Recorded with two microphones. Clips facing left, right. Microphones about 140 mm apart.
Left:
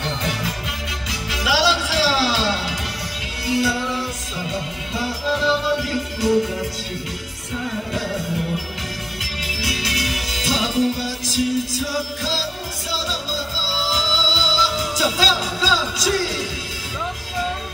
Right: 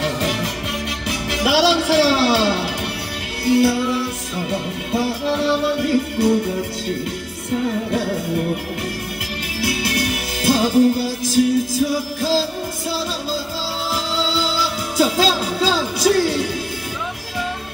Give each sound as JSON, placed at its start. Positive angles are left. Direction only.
{"t": 0.0, "sound": "music", "side_deg": -70}
{"t": 9.2, "sound": "music", "side_deg": -55}
{"t": 13.9, "sound": "music", "side_deg": -55}